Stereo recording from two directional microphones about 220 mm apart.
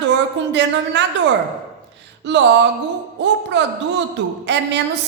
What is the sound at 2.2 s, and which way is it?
Speech, 55° right (ahead or behind).